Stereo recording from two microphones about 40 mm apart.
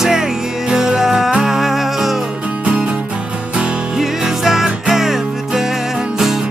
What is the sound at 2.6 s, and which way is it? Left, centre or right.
Music, right.